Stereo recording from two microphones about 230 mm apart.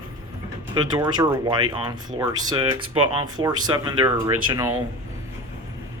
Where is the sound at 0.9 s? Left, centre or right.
Centre.